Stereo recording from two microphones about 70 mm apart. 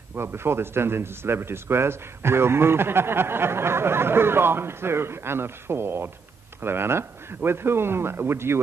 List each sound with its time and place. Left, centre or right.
0.1 s a man's voice: right